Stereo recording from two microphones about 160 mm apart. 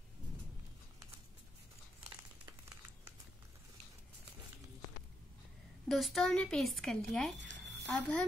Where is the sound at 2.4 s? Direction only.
20° right (ahead or behind).